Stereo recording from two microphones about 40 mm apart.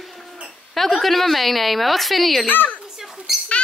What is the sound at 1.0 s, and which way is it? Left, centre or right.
A woman's voice, centre.